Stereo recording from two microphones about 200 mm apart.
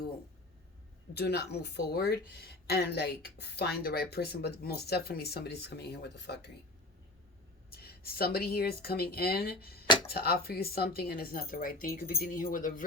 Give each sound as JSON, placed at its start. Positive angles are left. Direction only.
{"t": 1.1, "sound": "speech", "side_deg": 55}
{"t": 7.7, "sound": "speech", "side_deg": 50}